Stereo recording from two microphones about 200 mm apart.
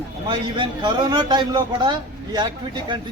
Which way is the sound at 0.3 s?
25° right (ahead or behind).